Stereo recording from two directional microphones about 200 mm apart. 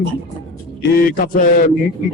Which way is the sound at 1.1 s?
45° left (ahead or behind).